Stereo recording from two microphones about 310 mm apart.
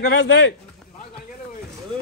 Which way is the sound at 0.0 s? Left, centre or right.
Left.